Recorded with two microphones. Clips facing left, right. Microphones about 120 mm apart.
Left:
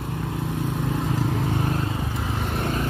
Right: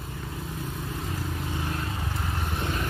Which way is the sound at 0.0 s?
75° left (ahead or behind).